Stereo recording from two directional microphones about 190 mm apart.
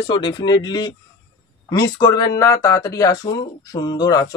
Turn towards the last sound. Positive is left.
turn(degrees=20)  # may be behind; listen again after turning